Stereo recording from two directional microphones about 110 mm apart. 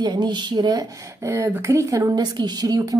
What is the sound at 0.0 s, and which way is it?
Speech, 40° right (ahead or behind).